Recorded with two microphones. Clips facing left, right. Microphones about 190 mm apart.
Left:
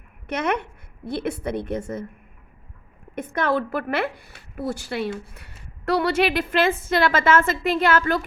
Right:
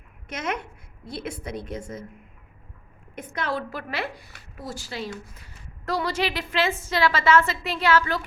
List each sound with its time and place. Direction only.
0.3 s a woman's voice: 60° left (ahead or behind)
3.2 s a woman's voice: 60° left (ahead or behind)